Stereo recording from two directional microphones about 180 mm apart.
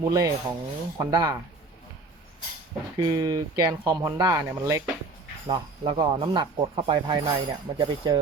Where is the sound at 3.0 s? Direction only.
20° right (ahead or behind).